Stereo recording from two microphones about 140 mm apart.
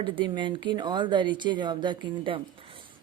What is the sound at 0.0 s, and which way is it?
Speech, 35° right (ahead or behind).